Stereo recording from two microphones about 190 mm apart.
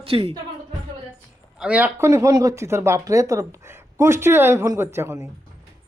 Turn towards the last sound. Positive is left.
turn(degrees=-15)  # may be behind; listen again after turning